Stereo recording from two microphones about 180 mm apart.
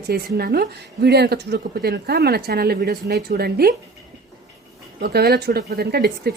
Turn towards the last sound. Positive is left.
turn(degrees=-60)  # may be behind; listen again after turning